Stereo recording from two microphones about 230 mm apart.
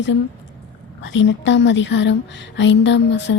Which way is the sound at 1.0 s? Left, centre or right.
Left.